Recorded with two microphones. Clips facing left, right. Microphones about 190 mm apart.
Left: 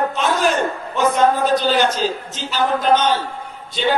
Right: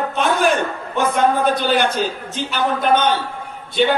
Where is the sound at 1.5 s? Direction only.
55° right (ahead or behind).